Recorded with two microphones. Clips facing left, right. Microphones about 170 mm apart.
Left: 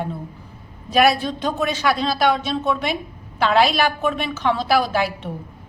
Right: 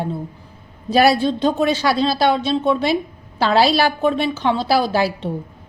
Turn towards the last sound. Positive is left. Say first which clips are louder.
# right 3 dB
turn(degrees=-30)  # may be behind; listen again after turning